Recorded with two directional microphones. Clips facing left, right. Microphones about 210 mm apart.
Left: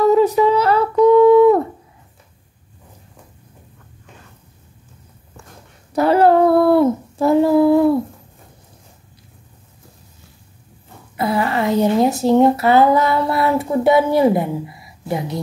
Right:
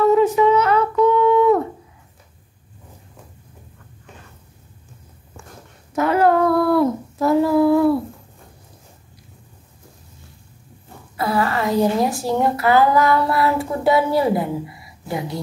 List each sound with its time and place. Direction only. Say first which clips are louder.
0.0 s a sound: left 1 dB; 35° left (ahead or behind)
5.9 s child singing: left 4 dB; 30° left (ahead or behind)
11.1 s speech: left 2 dB; 25° left (ahead or behind)